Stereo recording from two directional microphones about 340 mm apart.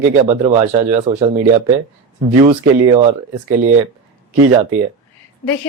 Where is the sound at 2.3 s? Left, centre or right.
Centre.